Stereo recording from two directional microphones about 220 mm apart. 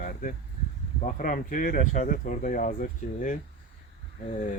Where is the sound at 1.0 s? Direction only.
40° left (ahead or behind).